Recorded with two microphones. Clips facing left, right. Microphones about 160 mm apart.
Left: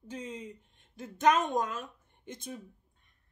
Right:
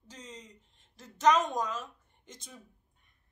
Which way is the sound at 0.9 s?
55° left (ahead or behind).